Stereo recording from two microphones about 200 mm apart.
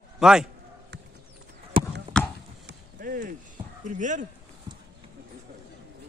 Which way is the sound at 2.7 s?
45° right (ahead or behind).